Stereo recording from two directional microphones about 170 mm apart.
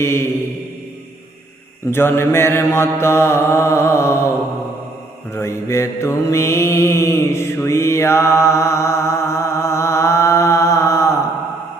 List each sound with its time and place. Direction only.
0.0 s mantra: 15° left (ahead or behind)
1.9 s mantra: 15° left (ahead or behind)
5.3 s mantra: 15° left (ahead or behind)